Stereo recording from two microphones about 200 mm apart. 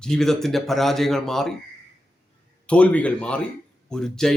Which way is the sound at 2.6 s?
5° left (ahead or behind).